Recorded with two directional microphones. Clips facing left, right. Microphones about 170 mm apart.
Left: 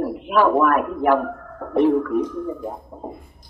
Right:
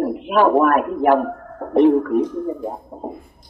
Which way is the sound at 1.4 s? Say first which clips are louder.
Right 3 dB; 35° right (ahead or behind).